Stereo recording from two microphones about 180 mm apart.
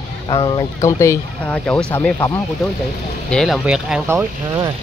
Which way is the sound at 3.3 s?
5° left (ahead or behind).